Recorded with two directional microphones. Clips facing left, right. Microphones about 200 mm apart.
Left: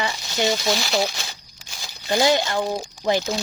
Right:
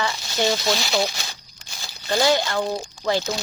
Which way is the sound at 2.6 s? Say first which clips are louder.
Even; 10° left (ahead or behind).